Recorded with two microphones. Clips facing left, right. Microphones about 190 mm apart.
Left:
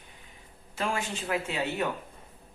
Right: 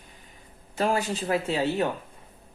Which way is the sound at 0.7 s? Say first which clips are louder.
Right 6 dB; 40° right (ahead or behind).